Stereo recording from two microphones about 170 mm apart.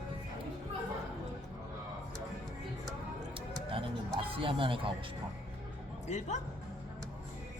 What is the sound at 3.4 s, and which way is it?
Music, 30° right (ahead or behind).